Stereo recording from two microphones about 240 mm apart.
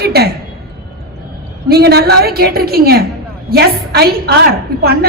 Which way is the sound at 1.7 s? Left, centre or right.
Right.